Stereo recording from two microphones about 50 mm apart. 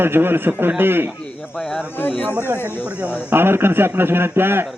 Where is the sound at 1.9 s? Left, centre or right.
Left.